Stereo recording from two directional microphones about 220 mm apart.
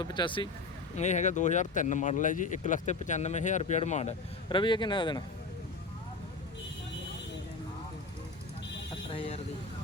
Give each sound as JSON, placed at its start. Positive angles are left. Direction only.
{"t": 0.0, "sound": "speech", "side_deg": 20}
{"t": 0.9, "sound": "speech", "side_deg": 30}
{"t": 4.4, "sound": "speech", "side_deg": 20}
{"t": 9.1, "sound": "vehicle", "side_deg": 25}